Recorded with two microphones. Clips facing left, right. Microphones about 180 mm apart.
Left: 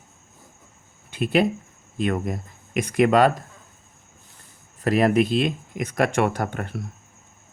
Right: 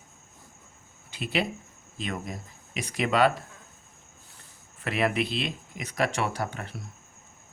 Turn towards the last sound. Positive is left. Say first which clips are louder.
# left 6 dB
turn(degrees=55)  # may be behind; listen again after turning